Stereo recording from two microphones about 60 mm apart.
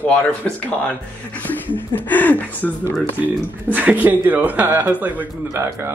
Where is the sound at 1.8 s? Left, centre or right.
Left.